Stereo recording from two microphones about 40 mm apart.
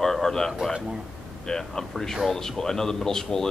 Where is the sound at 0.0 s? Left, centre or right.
Centre.